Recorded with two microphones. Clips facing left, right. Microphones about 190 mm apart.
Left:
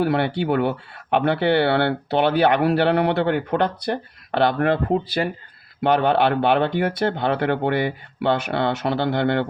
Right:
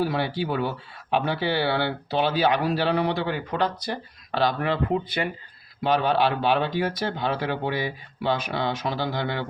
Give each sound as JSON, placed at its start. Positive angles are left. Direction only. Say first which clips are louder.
{"t": 0.0, "sound": "speech", "louder": "left 5 dB", "side_deg": 65}
{"t": 4.9, "sound": "speech", "louder": "left 4 dB", "side_deg": 30}
{"t": 5.8, "sound": "speech", "louder": "left 4 dB", "side_deg": 60}